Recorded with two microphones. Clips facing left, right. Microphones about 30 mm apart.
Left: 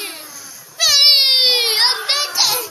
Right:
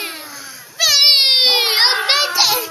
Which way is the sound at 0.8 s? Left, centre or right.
Centre.